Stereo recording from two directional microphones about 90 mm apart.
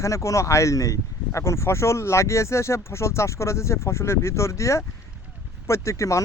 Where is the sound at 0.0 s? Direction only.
35° left (ahead or behind).